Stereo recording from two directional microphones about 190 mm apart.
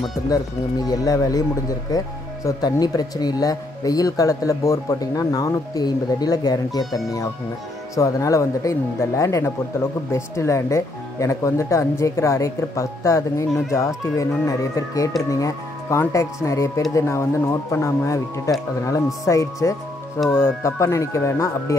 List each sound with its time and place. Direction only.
0.8 s speech: 20° left (ahead or behind)